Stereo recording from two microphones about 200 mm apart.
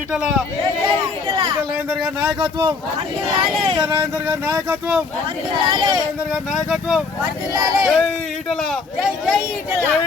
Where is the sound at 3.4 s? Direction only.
Centre (ahead or behind).